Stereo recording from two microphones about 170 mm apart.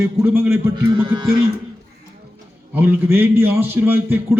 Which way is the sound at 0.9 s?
30° right (ahead or behind).